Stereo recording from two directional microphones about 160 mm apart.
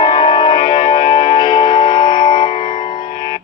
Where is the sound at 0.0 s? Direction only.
30° left (ahead or behind).